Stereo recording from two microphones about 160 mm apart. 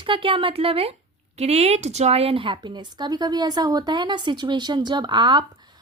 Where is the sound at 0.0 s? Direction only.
30° right (ahead or behind).